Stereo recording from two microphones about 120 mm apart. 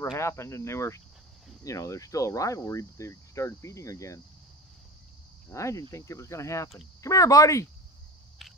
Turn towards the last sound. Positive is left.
turn(degrees=25)  # may be behind; listen again after turning